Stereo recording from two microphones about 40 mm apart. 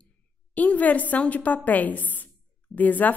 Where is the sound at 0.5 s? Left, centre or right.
Left.